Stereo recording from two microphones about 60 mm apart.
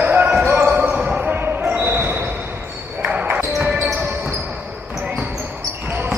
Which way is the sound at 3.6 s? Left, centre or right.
Right.